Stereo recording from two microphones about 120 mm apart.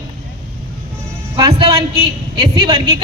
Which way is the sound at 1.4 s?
45° right (ahead or behind).